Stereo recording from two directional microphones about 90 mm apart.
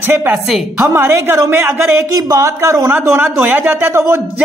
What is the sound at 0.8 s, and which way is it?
Speech, 30° right (ahead or behind).